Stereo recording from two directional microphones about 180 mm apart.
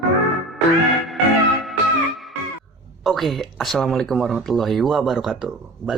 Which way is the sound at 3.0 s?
Centre (ahead or behind).